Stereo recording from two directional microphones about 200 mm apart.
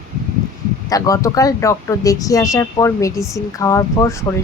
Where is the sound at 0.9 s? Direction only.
15° left (ahead or behind).